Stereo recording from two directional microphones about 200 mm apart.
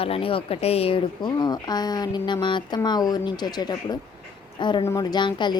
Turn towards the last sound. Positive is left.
turn(degrees=20)  # may be behind; listen again after turning